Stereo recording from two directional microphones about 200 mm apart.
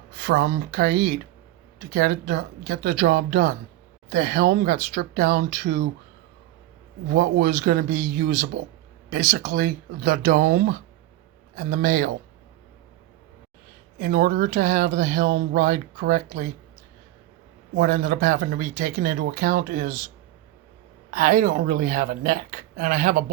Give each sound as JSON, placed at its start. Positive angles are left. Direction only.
{"t": 0.2, "sound": "speech", "side_deg": -55}
{"t": 7.1, "sound": "speech", "side_deg": -50}
{"t": 14.0, "sound": "speech", "side_deg": -50}
{"t": 17.7, "sound": "speech", "side_deg": -50}
{"t": 21.1, "sound": "speech", "side_deg": -45}